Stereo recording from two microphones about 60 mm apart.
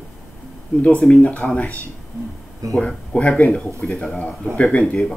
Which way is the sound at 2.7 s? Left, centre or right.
Centre.